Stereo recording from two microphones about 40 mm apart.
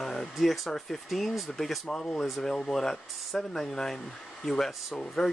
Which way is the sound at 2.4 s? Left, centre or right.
Left.